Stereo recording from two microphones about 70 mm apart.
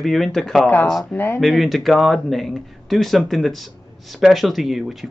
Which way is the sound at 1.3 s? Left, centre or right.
Centre.